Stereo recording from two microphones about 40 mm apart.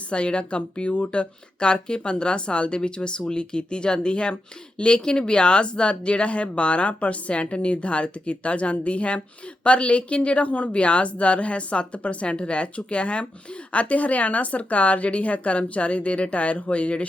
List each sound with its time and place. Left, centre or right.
0.1 s a woman's voice: left